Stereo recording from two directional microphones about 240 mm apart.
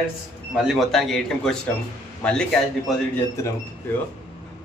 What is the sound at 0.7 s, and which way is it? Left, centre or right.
Speech, centre.